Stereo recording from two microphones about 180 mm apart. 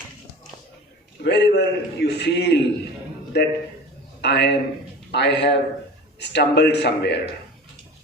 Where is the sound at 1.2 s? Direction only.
70° left (ahead or behind).